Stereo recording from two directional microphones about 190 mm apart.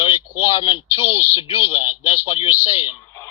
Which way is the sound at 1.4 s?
30° left (ahead or behind).